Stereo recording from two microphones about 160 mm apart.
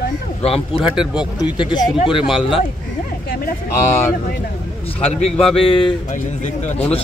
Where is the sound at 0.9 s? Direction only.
5° right (ahead or behind).